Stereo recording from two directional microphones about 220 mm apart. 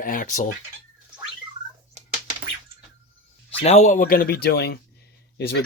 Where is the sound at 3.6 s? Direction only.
30° left (ahead or behind).